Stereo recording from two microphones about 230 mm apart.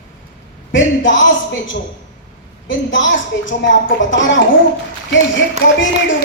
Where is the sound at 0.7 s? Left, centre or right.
Left.